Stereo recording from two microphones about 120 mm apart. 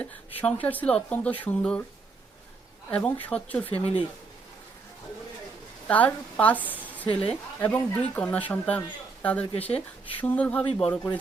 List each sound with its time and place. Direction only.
0.0 s speech: 10° left (ahead or behind)
2.9 s speech: 10° left (ahead or behind)
3.7 s speech: 55° left (ahead or behind)
5.9 s speech: 10° left (ahead or behind)
7.0 s a woman's voice: 50° left (ahead or behind)
7.6 s speech: 15° left (ahead or behind)